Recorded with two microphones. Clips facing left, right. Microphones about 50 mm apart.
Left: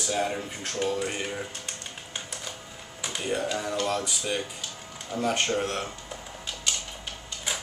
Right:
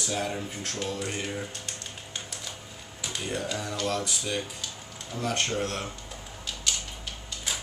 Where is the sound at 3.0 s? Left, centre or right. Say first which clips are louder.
Left 3 dB; centre.